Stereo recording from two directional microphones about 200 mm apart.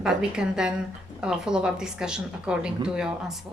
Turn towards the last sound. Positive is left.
turn(degrees=-5)  # may be behind; listen again after turning